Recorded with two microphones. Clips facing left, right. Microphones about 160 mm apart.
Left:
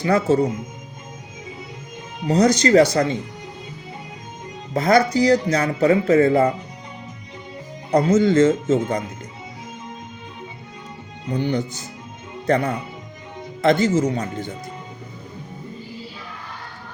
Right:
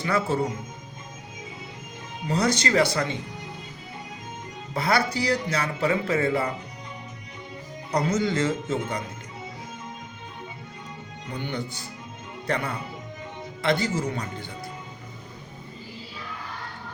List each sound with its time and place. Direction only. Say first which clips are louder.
0.0 s speech: left 7 dB; 40° left (ahead or behind)
2.2 s speech: left 8 dB; 40° left (ahead or behind)
4.7 s speech: left 8 dB; 45° left (ahead or behind)
7.9 s speech: left 9 dB; 50° left (ahead or behind)
11.3 s speech: left 9 dB; 40° left (ahead or behind)